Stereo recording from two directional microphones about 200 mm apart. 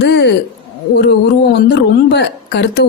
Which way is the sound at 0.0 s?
55° left (ahead or behind).